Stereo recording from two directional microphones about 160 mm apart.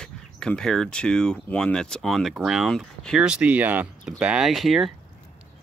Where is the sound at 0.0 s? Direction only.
5° left (ahead or behind).